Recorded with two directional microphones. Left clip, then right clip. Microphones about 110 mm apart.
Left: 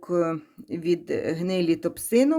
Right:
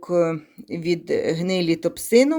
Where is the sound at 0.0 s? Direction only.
15° right (ahead or behind).